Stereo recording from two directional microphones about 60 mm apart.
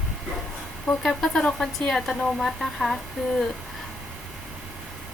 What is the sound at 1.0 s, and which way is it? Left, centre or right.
A woman's voice, centre.